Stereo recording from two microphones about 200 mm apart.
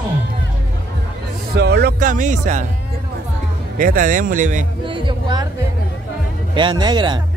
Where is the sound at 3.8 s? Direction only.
45° right (ahead or behind).